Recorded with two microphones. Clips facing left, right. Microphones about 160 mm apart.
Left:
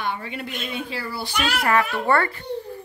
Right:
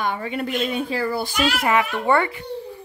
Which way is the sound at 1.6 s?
15° right (ahead or behind).